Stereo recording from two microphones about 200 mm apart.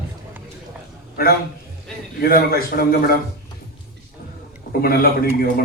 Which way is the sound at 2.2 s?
50° left (ahead or behind).